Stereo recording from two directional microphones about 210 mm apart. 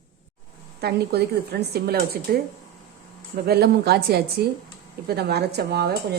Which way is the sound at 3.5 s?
50° right (ahead or behind).